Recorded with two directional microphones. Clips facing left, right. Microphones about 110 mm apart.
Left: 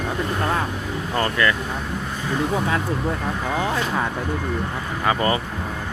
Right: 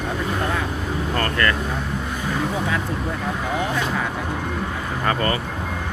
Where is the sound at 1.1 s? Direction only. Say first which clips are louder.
Left 2 dB; 15° left (ahead or behind).